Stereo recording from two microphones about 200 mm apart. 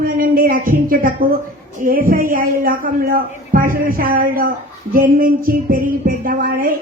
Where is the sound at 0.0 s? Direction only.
45° right (ahead or behind).